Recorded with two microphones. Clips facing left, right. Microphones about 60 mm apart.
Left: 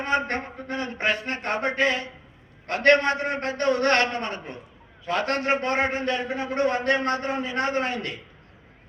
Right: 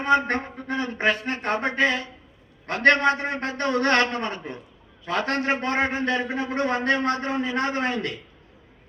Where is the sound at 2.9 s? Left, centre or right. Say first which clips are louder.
Even; left.